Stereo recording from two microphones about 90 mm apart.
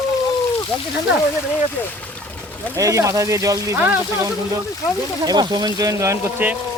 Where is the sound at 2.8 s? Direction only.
35° right (ahead or behind).